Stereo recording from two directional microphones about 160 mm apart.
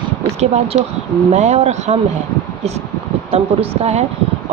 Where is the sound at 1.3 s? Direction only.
45° right (ahead or behind).